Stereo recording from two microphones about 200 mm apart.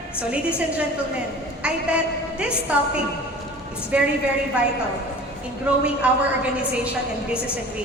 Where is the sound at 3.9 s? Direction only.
5° right (ahead or behind).